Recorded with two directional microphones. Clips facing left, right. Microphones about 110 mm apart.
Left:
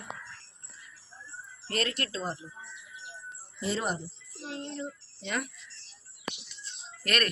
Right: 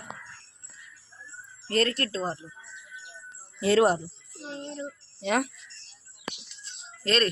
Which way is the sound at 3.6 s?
90° right.